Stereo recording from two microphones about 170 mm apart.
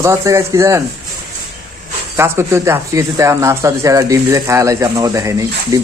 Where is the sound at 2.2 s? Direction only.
15° right (ahead or behind).